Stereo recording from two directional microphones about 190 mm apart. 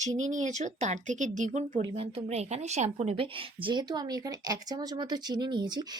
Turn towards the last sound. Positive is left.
turn(degrees=-20)  # may be behind; listen again after turning